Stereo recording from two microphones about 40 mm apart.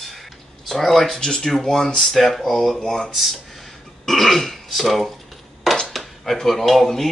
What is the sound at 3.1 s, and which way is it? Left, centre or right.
Throat clearing, centre.